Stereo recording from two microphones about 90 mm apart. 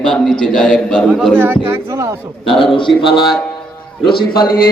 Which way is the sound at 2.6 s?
70° left (ahead or behind).